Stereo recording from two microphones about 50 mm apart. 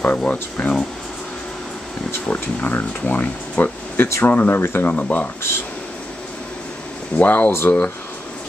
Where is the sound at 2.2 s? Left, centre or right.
Left.